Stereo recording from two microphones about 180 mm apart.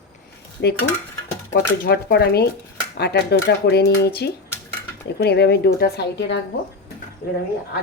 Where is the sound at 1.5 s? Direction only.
55° left (ahead or behind); by 6.4 s 70° left (ahead or behind).